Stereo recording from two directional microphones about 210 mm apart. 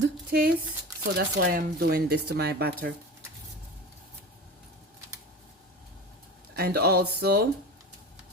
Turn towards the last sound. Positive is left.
turn(degrees=-50)  # may be behind; listen again after turning